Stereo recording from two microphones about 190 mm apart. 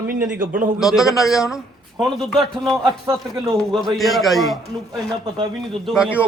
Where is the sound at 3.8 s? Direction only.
Centre (ahead or behind).